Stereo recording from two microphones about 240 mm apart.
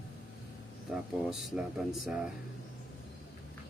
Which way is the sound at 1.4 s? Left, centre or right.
Centre.